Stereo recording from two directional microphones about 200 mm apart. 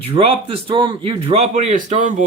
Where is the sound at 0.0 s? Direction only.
30° right (ahead or behind).